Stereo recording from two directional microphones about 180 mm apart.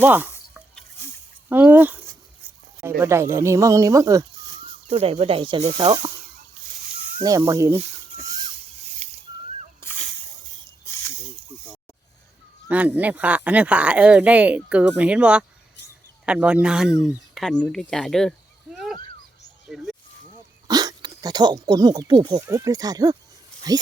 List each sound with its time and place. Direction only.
0.0 s speech: 10° right (ahead or behind)
1.5 s speech: 10° right (ahead or behind)
4.9 s speech: 35° right (ahead or behind)
7.2 s speech: 20° right (ahead or behind)
9.0 s a sound: 35° right (ahead or behind)
12.6 s speech: 10° right (ahead or behind)
19.6 s a sound: centre (ahead or behind)
20.7 s speech: 20° right (ahead or behind)